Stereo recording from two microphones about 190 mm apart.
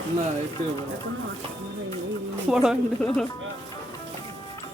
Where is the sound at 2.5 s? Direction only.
5° right (ahead or behind).